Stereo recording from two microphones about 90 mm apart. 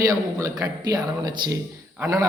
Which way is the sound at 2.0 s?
25° right (ahead or behind).